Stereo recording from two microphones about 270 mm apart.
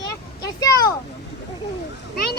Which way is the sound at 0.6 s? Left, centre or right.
Centre.